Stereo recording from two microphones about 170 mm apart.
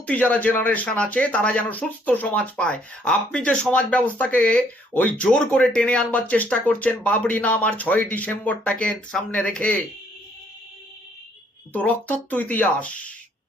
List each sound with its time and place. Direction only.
0.0 s speech: 10° left (ahead or behind)
11.7 s speech: 10° left (ahead or behind)